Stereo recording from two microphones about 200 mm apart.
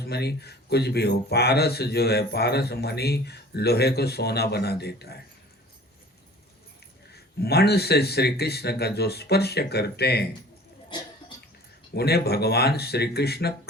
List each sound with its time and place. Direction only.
0.0 s speech: 55° left (ahead or behind)
7.1 s speech: 55° left (ahead or behind)
10.8 s a sound: 20° left (ahead or behind)
11.9 s speech: 55° left (ahead or behind)